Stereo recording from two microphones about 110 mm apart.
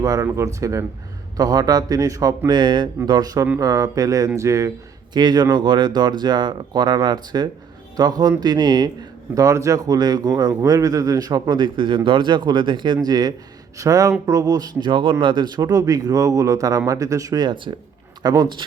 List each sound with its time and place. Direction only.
0.0 s a man's voice: 35° right (ahead or behind)
5.1 s a man's voice: 40° right (ahead or behind)